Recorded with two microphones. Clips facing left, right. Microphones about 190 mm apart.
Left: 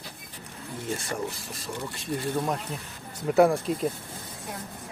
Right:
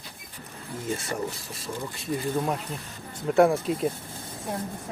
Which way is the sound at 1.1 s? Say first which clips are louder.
Right 1 dB; centre (ahead or behind).